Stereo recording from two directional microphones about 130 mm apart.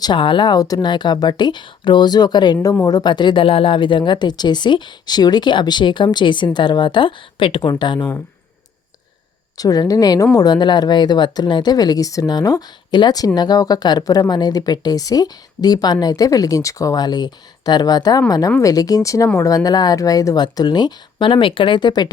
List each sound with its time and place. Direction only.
0.0 s speech: 40° left (ahead or behind)
9.6 s speech: 30° left (ahead or behind)